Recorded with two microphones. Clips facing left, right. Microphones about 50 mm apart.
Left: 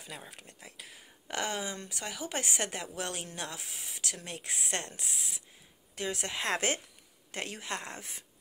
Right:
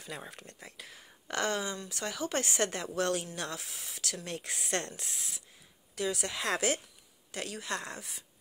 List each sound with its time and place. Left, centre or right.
0.3 s speech: centre
1.3 s speech: centre